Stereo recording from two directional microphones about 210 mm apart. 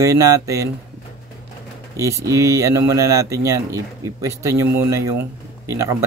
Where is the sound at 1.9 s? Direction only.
15° right (ahead or behind).